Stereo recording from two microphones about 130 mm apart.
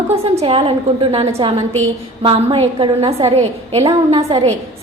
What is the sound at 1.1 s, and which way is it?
A woman's voice, 45° right (ahead or behind).